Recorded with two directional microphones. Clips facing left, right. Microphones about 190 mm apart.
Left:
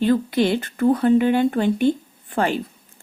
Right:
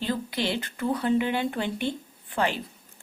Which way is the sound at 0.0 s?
50° left (ahead or behind).